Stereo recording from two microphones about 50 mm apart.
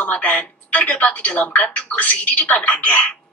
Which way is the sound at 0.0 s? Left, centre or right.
Left.